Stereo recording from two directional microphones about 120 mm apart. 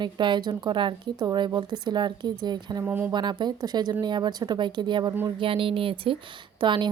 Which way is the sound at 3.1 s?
40° right (ahead or behind).